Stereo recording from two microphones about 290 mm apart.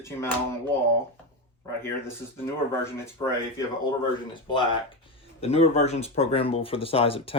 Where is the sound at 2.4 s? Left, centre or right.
Centre.